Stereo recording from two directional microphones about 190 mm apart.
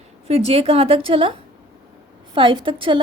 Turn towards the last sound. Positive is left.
turn(degrees=-25)  # may be behind; listen again after turning